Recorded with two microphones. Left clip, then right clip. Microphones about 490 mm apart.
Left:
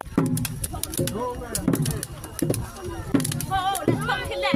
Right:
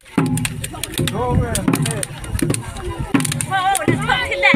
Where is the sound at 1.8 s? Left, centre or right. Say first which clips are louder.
Right 8 dB; left.